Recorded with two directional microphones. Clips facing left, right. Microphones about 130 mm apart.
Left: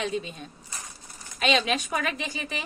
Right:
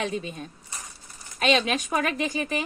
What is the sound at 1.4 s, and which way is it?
Speech, 40° right (ahead or behind).